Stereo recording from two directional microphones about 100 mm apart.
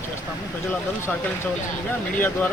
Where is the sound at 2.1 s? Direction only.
15° left (ahead or behind).